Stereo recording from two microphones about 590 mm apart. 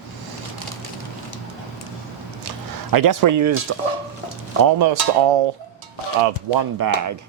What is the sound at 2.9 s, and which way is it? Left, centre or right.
Speech, right.